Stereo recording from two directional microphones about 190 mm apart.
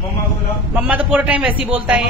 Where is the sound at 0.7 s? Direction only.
5° right (ahead or behind).